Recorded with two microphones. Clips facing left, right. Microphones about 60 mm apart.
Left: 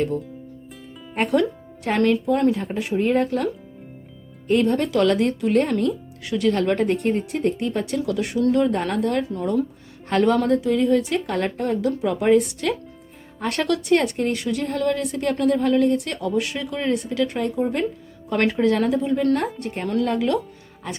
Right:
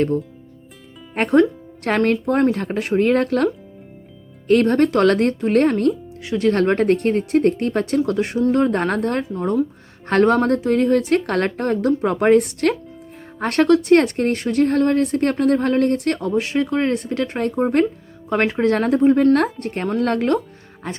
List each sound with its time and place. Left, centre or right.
2.0 s speech: right
4.4 s speech: right
6.2 s speech: right
6.5 s speech: right
8.7 s speech: right
13.4 s speech: right
16.3 s speech: right
18.3 s speech: right
18.6 s speech: right